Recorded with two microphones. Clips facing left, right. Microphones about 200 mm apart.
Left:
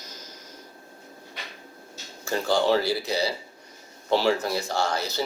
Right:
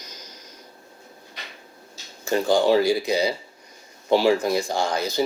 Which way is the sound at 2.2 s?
15° right (ahead or behind).